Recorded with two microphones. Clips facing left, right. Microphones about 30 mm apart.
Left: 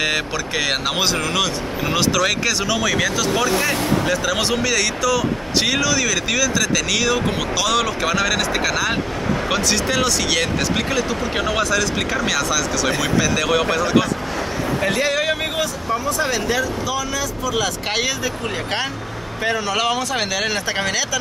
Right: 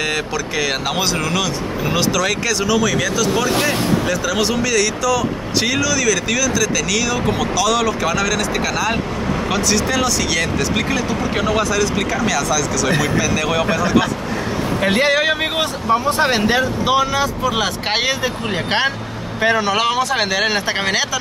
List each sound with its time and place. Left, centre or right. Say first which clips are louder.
0.0 s speech: even; centre
14.8 s speech: right 5 dB; right
19.7 s speech: right 3 dB; centre